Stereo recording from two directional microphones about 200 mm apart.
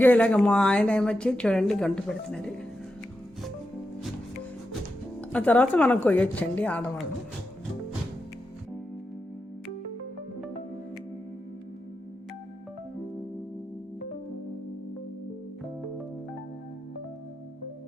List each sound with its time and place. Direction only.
0.0 s a woman's voice: 5° left (ahead or behind)
5.3 s a woman's voice: 5° left (ahead or behind)